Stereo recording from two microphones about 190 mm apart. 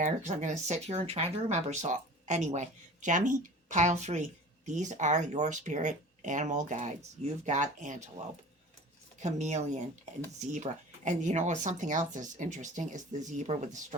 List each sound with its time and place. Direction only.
0.0 s speech: 40° right (ahead or behind)
9.2 s speech: 35° right (ahead or behind)